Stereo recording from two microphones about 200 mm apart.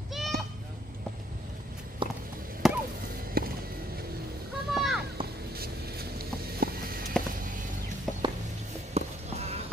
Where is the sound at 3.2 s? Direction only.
45° right (ahead or behind).